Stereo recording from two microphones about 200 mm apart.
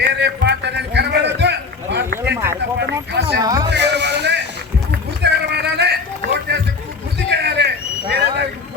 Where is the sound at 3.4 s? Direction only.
20° right (ahead or behind).